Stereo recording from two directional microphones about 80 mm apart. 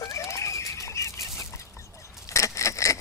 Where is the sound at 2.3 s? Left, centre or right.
Left.